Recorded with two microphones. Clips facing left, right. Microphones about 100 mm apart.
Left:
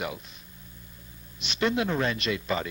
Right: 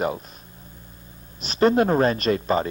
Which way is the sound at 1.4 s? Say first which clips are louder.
Right 8 dB; 40° right (ahead or behind).